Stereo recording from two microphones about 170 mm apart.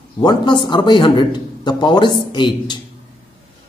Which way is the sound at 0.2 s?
25° left (ahead or behind).